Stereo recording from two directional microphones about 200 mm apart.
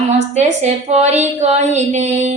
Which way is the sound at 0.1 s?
35° right (ahead or behind).